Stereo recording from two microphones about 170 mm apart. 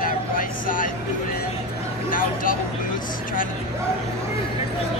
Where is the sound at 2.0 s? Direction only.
55° left (ahead or behind).